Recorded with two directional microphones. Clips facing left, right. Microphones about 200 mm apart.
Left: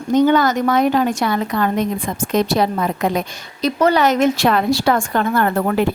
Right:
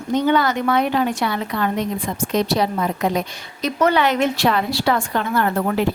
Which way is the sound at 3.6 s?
35° left (ahead or behind).